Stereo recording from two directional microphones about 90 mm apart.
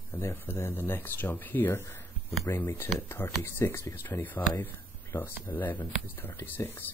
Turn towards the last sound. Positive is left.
turn(degrees=25)  # may be behind; listen again after turning